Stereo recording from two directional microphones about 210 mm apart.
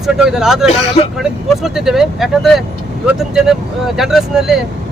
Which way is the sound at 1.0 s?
25° left (ahead or behind).